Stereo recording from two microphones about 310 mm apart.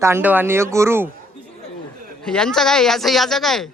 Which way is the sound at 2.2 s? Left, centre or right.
Centre.